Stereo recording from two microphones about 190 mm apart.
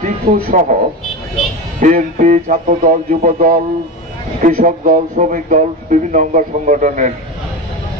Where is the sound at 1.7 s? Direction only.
45° right (ahead or behind).